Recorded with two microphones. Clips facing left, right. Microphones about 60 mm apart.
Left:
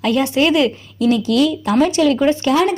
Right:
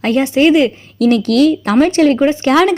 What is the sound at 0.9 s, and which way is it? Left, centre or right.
Speech, right.